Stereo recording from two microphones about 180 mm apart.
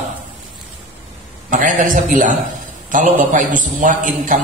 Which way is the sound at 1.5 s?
45° right (ahead or behind).